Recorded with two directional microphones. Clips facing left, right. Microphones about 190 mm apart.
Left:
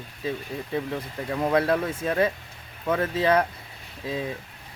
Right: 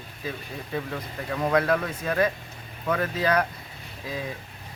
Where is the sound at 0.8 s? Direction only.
15° left (ahead or behind).